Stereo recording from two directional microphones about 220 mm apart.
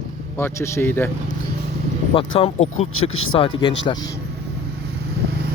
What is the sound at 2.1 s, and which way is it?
Speech, 25° left (ahead or behind).